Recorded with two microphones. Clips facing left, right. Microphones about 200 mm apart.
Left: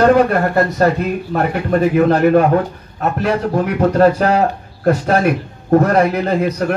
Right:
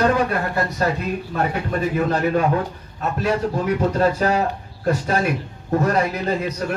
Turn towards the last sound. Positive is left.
turn(degrees=60)  # may be behind; listen again after turning